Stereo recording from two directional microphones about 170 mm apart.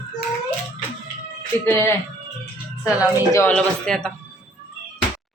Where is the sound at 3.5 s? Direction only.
5° left (ahead or behind).